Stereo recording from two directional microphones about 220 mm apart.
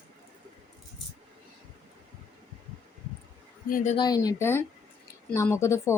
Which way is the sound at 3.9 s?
20° left (ahead or behind).